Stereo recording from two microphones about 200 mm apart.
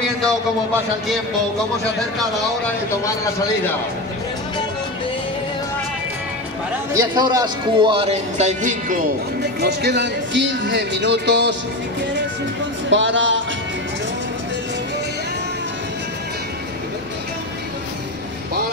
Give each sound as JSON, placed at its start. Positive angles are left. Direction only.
{"t": 6.9, "sound": "a man's voice", "side_deg": -20}
{"t": 12.9, "sound": "speech", "side_deg": -65}